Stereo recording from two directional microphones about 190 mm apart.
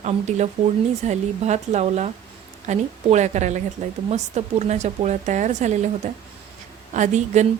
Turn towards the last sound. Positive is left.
turn(degrees=-35)  # may be behind; listen again after turning